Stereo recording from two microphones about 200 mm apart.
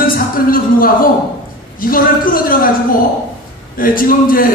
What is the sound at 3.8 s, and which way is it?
Speech, 45° left (ahead or behind).